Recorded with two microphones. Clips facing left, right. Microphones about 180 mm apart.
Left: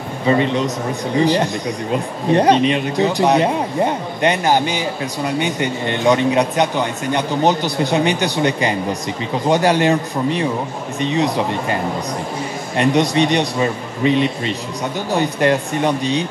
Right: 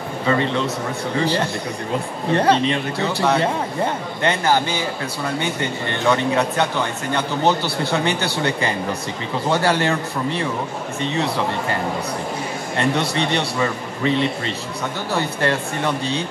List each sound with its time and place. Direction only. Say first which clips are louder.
0.3 s speech: left 4 dB; 15° left (ahead or behind)